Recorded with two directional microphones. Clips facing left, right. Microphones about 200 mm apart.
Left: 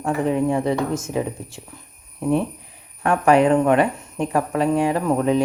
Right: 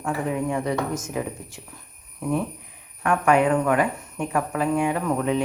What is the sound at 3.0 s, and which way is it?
A woman's voice, 30° left (ahead or behind).